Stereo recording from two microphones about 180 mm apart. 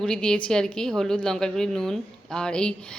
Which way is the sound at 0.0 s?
5° left (ahead or behind).